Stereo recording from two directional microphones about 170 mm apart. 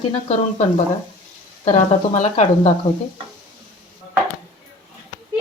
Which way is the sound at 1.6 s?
40° left (ahead or behind).